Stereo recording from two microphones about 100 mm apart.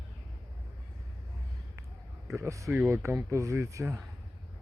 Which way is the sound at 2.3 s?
30° right (ahead or behind).